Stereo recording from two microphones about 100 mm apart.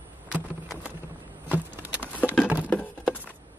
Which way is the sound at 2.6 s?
15° left (ahead or behind).